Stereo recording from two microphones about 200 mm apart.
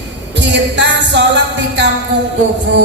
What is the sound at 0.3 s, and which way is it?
Music, 60° right (ahead or behind).